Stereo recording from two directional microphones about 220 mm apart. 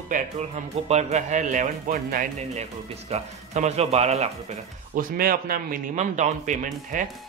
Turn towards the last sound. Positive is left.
turn(degrees=-35)  # may be behind; listen again after turning